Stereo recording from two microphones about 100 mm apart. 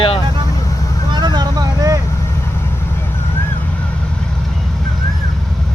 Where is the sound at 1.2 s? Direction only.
45° right (ahead or behind).